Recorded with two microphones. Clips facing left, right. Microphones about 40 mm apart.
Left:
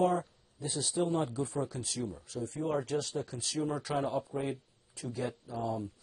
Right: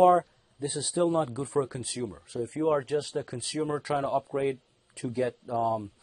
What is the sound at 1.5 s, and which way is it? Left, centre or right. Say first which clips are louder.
A man's voice: right 6 dB; centre.